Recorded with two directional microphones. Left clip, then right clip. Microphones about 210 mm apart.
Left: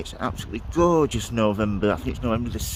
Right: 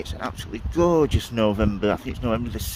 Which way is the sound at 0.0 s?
10° left (ahead or behind).